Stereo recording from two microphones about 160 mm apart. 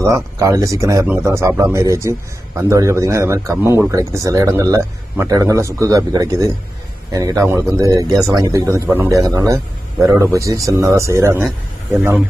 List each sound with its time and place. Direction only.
0.0 s a man's voice: 20° right (ahead or behind)